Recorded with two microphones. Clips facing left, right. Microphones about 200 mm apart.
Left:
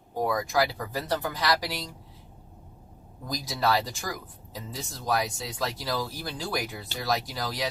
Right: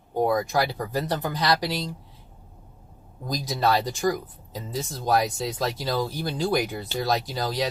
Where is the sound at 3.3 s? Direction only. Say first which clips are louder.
Right 5 dB; 20° right (ahead or behind).